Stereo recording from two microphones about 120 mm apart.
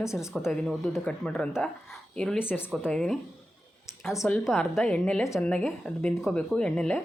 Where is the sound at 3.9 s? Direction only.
25° left (ahead or behind).